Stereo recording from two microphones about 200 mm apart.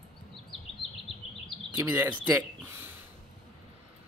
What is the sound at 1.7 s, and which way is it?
Speech, 10° right (ahead or behind).